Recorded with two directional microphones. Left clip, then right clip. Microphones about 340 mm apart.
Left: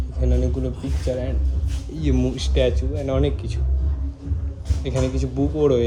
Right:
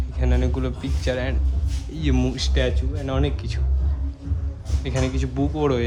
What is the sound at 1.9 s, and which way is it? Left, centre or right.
Speech, centre.